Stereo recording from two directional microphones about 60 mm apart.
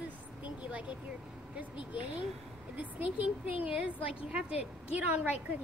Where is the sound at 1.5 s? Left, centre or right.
Right.